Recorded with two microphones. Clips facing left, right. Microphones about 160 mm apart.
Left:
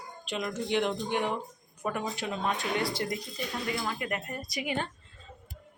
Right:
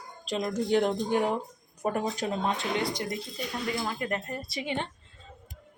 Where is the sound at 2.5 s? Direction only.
20° right (ahead or behind).